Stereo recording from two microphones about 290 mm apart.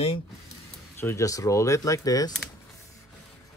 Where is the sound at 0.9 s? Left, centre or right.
Centre.